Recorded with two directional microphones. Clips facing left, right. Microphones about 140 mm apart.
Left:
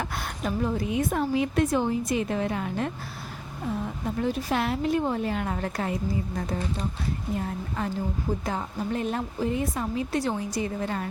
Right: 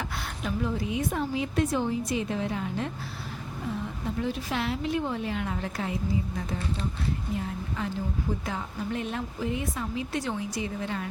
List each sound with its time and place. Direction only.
0.0 s a woman's voice: 45° left (ahead or behind)
4.2 s a woman's voice: 45° left (ahead or behind)
7.3 s a woman's voice: 45° left (ahead or behind)